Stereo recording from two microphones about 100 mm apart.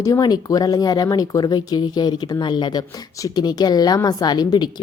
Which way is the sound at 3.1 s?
40° left (ahead or behind).